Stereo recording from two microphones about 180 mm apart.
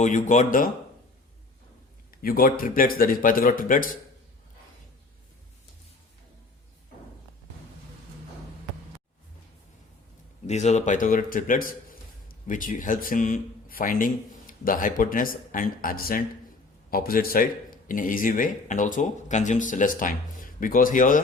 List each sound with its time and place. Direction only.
0.0 s speech: 40° left (ahead or behind)
2.2 s speech: 55° left (ahead or behind)
10.4 s a man's voice: 40° left (ahead or behind)